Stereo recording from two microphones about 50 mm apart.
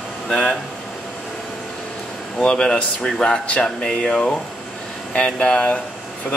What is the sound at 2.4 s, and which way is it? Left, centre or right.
Speech, centre.